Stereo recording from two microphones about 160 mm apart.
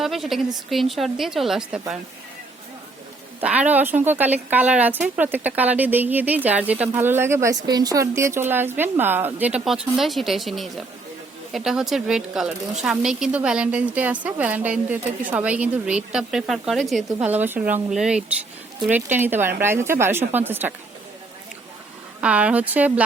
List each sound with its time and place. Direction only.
0.0 s a woman's voice: centre (ahead or behind)
3.4 s a woman's voice: 10° right (ahead or behind)
17.2 s a woman's voice: 10° right (ahead or behind)
22.2 s a woman's voice: 5° right (ahead or behind)